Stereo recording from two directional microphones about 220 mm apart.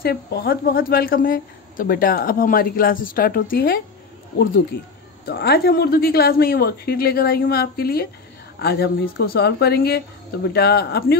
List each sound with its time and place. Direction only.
0.0 s speech: 45° left (ahead or behind)
5.2 s speech: 50° left (ahead or behind)